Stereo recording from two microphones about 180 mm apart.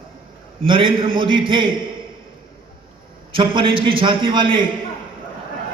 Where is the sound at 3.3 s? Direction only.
30° right (ahead or behind).